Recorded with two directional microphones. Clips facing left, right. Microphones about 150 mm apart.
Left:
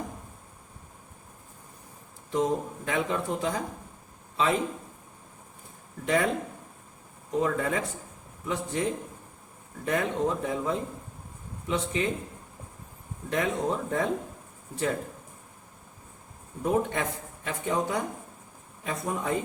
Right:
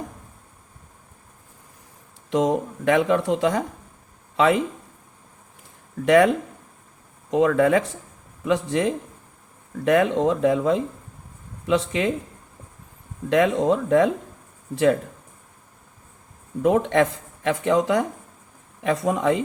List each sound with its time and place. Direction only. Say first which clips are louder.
2.3 s a man's voice: right 6 dB; 90° right
6.1 s speech: right 10 dB; 85° right
13.3 s speech: right 9 dB; 90° right
16.6 s speech: right 8 dB; 90° right